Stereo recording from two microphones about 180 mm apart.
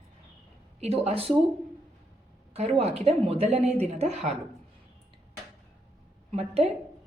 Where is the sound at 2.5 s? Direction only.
35° right (ahead or behind).